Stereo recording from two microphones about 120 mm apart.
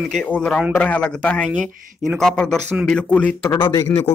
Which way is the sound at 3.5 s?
30° left (ahead or behind).